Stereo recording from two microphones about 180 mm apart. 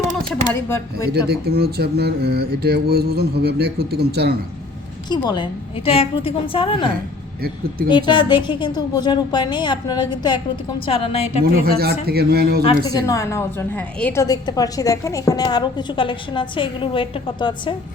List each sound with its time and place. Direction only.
0.5 s speech: 15° left (ahead or behind)
1.3 s mantra: 60° right (ahead or behind)
5.0 s a woman's voice: 25° left (ahead or behind)
11.5 s mantra: 60° right (ahead or behind)
12.6 s a woman's voice: 20° left (ahead or behind)